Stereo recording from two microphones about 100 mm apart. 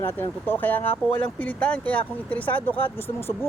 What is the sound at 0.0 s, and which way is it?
Speech, 20° left (ahead or behind).